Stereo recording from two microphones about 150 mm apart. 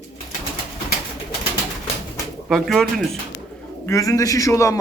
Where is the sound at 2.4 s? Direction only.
Centre (ahead or behind).